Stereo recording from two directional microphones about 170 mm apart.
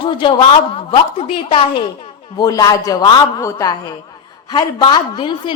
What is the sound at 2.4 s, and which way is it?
A woman's voice, 20° left (ahead or behind).